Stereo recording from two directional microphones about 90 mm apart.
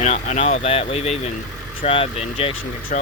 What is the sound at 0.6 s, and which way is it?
Speech, 90° left.